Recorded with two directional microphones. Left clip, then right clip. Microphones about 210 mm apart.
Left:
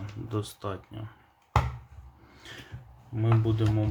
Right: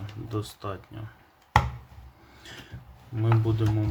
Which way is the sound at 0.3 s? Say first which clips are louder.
Even; 10° left (ahead or behind).